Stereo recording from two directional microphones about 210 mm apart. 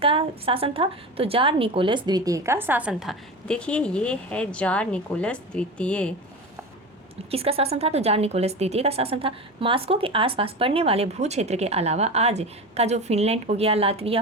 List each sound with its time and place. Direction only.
0.0 s a woman's voice: 25° right (ahead or behind); by 6.1 s 5° left (ahead or behind)
7.3 s a woman's voice: 30° right (ahead or behind)